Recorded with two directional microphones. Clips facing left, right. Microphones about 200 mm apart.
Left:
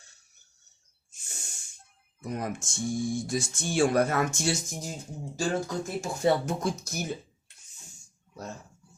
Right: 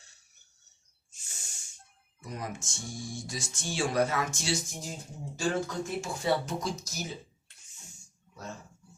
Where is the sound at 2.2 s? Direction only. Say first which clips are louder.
Left 6 dB; 55° left (ahead or behind).